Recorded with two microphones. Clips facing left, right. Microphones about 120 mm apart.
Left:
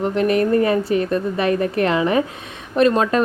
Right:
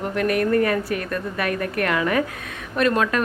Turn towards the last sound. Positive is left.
turn(degrees=30)  # may be behind; listen again after turning